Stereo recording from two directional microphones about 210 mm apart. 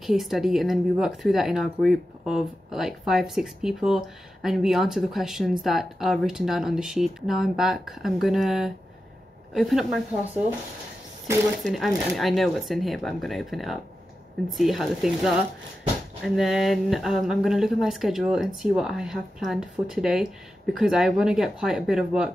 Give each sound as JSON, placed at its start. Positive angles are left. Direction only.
{"t": 0.0, "sound": "speech", "side_deg": 0}
{"t": 11.6, "sound": "speech", "side_deg": 0}